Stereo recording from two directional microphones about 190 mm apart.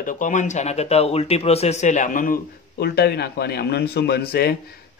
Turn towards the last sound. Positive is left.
turn(degrees=55)  # may be behind; listen again after turning